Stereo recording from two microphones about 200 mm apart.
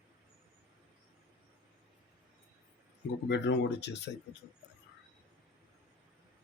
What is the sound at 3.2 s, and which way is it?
Speech, 60° left (ahead or behind).